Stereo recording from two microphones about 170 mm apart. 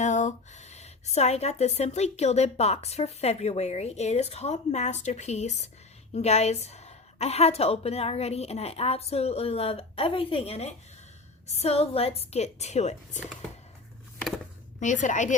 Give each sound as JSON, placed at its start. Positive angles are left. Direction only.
{"t": 0.0, "sound": "a woman's voice", "side_deg": 45}
{"t": 14.8, "sound": "a woman's voice", "side_deg": 45}